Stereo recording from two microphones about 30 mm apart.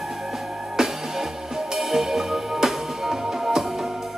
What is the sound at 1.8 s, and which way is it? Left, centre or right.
Music, centre.